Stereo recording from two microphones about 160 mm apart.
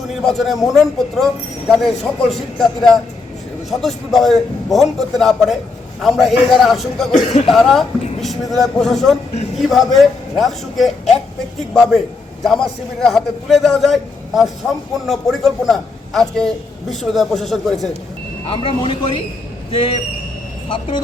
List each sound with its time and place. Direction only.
0.2 s speech: centre (ahead or behind)
7.3 s speech: 40° left (ahead or behind)
7.5 s speech: centre (ahead or behind)
18.4 s speech: 35° left (ahead or behind)